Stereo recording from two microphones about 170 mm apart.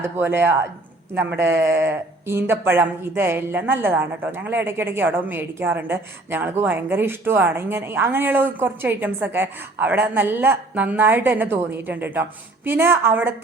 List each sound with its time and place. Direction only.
0.0 s speech: 10° right (ahead or behind)